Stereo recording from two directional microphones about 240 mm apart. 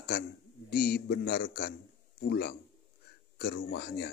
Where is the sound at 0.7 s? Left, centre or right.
Left.